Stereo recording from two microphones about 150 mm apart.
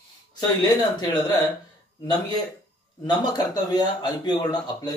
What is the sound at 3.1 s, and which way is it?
A man's voice, 30° left (ahead or behind).